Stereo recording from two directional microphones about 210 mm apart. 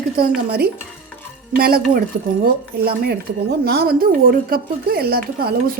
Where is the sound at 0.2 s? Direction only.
45° right (ahead or behind).